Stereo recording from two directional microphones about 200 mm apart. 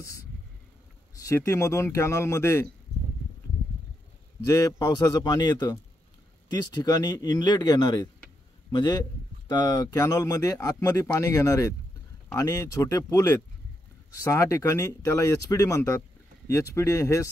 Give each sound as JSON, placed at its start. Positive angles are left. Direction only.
{"t": 1.1, "sound": "speech", "side_deg": 15}
{"t": 4.5, "sound": "a man's voice", "side_deg": 15}